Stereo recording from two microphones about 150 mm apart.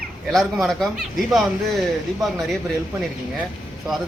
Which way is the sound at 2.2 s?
Centre (ahead or behind).